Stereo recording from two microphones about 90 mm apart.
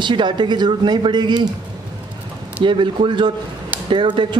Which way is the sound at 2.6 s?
65° right (ahead or behind).